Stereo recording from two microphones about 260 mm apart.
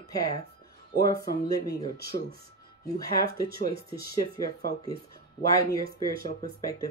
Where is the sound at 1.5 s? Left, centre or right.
Centre.